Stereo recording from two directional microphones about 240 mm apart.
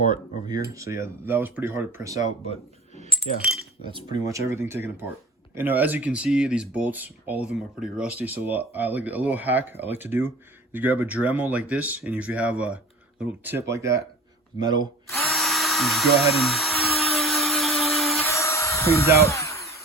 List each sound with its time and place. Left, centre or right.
0.4 s speech: centre
3.9 s speech: centre
15.3 s dental drill: centre
18.3 s music: centre
19.2 s a sound: centre